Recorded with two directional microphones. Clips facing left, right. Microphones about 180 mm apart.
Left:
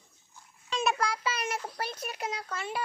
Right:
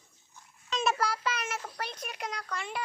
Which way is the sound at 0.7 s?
10° left (ahead or behind).